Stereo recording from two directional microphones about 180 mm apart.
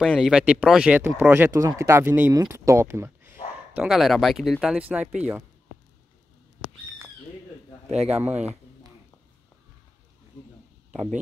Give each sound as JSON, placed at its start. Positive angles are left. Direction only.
{"t": 0.0, "sound": "speech", "side_deg": -5}
{"t": 8.1, "sound": "speech", "side_deg": -10}